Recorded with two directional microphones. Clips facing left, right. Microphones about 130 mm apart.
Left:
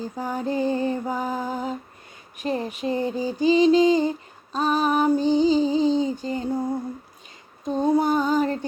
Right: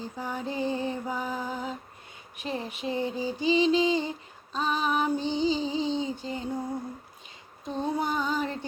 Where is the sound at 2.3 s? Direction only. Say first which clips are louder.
Left 7 dB; 45° left (ahead or behind).